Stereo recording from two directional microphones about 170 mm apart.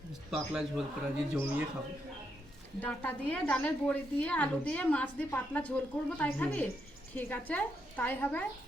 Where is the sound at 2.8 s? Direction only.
10° left (ahead or behind).